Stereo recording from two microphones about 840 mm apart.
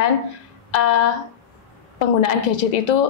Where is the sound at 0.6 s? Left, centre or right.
Left.